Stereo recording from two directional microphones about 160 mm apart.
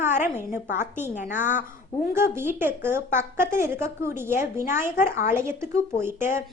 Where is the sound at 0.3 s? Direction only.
15° right (ahead or behind).